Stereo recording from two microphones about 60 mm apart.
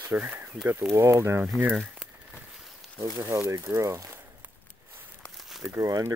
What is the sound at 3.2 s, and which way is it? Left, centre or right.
Speech, right.